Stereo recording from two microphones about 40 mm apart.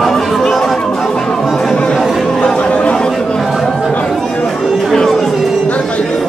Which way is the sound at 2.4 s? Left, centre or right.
Left.